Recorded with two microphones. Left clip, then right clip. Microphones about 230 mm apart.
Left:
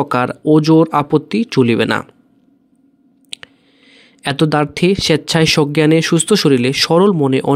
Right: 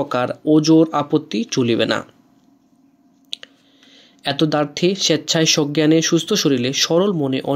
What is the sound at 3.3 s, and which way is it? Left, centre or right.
Chewing, left.